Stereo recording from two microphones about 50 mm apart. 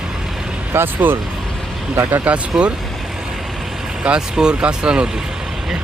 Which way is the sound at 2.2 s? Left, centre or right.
Right.